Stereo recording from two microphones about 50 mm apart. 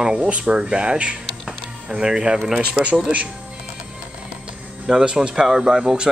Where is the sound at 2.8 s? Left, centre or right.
Left.